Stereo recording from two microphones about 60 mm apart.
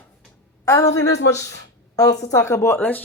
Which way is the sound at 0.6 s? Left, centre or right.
Left.